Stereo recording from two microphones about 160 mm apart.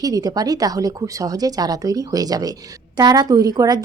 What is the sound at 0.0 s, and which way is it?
Speech, 25° right (ahead or behind).